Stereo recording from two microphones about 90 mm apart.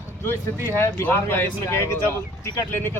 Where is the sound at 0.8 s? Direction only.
25° left (ahead or behind).